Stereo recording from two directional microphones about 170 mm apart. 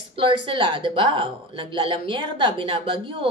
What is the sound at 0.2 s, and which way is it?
A woman's voice, 30° right (ahead or behind).